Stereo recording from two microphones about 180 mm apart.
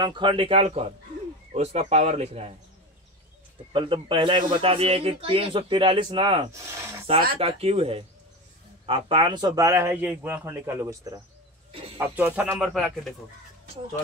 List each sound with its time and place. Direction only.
0.0 s a man's voice: 25° right (ahead or behind)
3.7 s a man's voice: 30° right (ahead or behind)
6.5 s speech: 15° right (ahead or behind)
7.3 s speech: 35° right (ahead or behind); by 12.9 s centre (ahead or behind)